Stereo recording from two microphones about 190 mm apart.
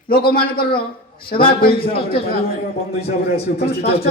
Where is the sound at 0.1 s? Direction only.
50° left (ahead or behind).